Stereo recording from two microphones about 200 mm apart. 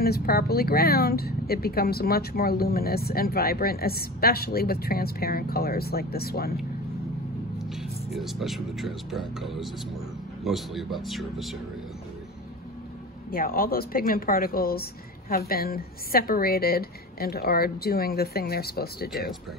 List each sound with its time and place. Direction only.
0.0 s speech: 50° left (ahead or behind)
7.7 s speech: centre (ahead or behind)
13.3 s speech: 45° left (ahead or behind)